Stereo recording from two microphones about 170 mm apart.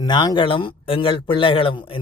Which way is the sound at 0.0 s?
25° left (ahead or behind).